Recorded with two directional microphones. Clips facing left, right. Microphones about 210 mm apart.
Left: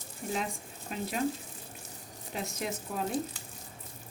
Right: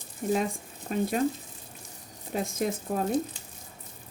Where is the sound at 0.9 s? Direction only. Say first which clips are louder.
Right 9 dB; 45° right (ahead or behind).